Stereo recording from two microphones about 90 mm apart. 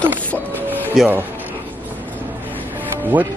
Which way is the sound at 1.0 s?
5° right (ahead or behind).